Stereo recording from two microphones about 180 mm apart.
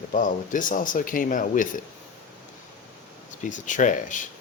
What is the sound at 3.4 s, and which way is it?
Speech, 45° left (ahead or behind).